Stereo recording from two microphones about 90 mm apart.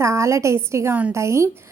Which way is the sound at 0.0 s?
35° right (ahead or behind).